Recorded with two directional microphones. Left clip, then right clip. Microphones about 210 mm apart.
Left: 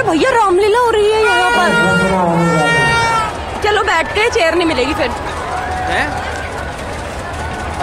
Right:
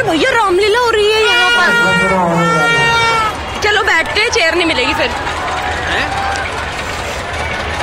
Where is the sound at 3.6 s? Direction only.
15° left (ahead or behind).